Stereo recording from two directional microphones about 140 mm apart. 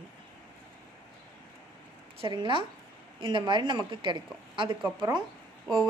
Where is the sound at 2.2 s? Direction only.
35° right (ahead or behind).